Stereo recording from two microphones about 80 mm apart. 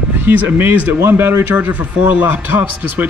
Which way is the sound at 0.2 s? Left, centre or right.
Right.